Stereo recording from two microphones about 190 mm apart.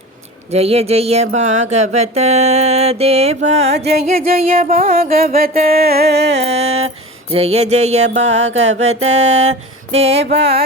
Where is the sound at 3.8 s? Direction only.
55° right (ahead or behind).